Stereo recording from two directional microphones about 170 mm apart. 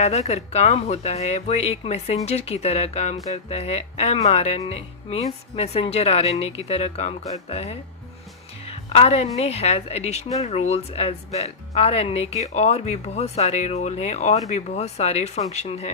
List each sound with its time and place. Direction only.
0.0 s a woman's voice: 40° left (ahead or behind)
8.9 s a woman's voice: 40° left (ahead or behind)